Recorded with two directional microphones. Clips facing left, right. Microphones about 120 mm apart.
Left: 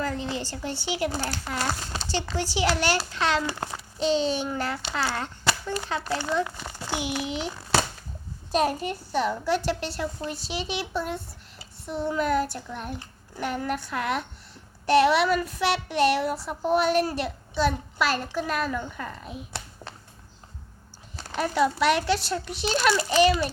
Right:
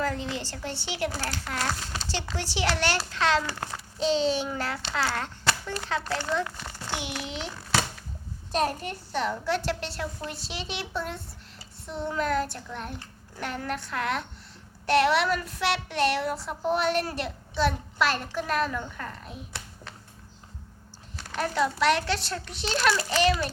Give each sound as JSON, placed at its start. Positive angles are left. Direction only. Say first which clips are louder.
{"t": 0.0, "sound": "a woman's voice", "louder": "left 1 dB", "side_deg": 0}
{"t": 1.1, "sound": "a child's voice", "louder": "left 3 dB", "side_deg": 25}
{"t": 1.5, "sound": "a woman's voice", "louder": "left 1 dB", "side_deg": 5}
{"t": 3.4, "sound": "speech", "louder": "left 3 dB", "side_deg": 20}
{"t": 4.0, "sound": "a woman's voice", "louder": "left 1 dB", "side_deg": 0}
{"t": 8.5, "sound": "a woman's voice", "louder": "left 3 dB", "side_deg": 10}
{"t": 21.3, "sound": "speech", "louder": "left 3 dB", "side_deg": 10}
{"t": 23.0, "sound": "a child's voice", "louder": "left 5 dB", "side_deg": 20}